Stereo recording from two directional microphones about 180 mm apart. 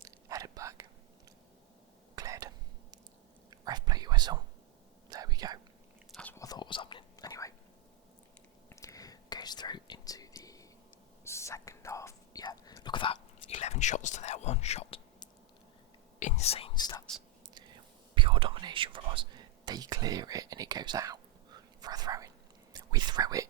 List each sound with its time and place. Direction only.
0.0 s whispering: 20° right (ahead or behind)
2.1 s a sound: 20° right (ahead or behind)
3.5 s whispering: 20° right (ahead or behind)
6.1 s chewing: 5° left (ahead or behind)
6.4 s whispering: 25° left (ahead or behind)
8.7 s whispering: 20° left (ahead or behind)
13.5 s whispering: 40° left (ahead or behind); by 17.0 s 25° left (ahead or behind)
18.1 s whispering: 30° right (ahead or behind)